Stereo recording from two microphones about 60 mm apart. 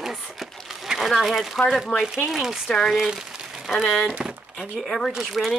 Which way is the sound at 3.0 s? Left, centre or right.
Centre.